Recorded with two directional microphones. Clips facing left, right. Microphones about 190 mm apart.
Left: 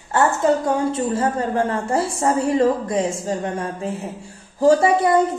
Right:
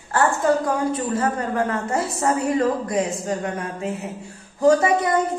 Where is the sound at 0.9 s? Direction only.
30° left (ahead or behind).